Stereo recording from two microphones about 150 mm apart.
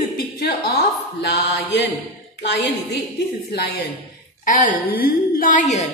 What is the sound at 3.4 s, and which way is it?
Speech, 90° left.